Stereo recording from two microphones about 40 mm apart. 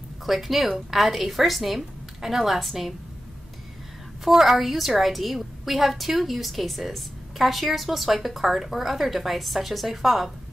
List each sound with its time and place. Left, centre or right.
0.2 s a woman's voice: centre
4.2 s a woman's voice: centre